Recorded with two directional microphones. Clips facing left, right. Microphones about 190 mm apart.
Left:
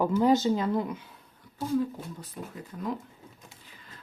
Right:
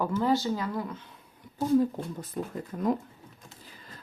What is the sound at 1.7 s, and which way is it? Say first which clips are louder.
Speech: right 4 dB; 45° right (ahead or behind).